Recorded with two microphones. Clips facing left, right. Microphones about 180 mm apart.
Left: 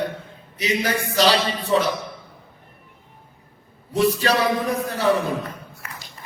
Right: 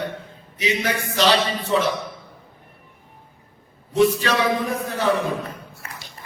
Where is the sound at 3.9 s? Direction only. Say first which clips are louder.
Right 1 dB; 35° left (ahead or behind).